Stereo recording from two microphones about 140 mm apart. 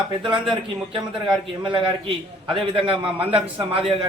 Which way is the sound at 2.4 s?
40° right (ahead or behind).